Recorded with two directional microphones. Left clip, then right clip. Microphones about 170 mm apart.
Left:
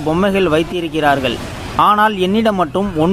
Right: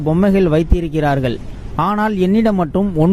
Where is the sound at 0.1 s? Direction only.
50° right (ahead or behind).